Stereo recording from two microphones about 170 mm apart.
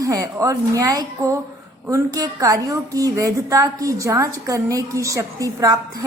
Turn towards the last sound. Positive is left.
turn(degrees=-20)  # may be behind; listen again after turning